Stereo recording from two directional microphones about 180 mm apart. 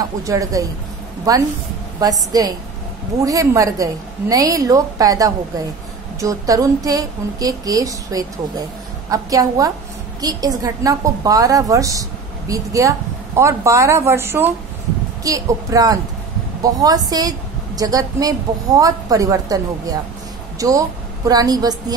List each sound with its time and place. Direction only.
0.2 s a woman's voice: 20° right (ahead or behind)